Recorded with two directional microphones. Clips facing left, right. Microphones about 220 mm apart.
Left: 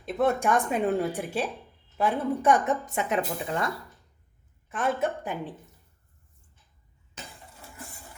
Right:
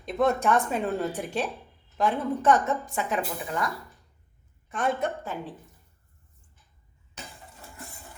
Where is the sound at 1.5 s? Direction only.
10° left (ahead or behind).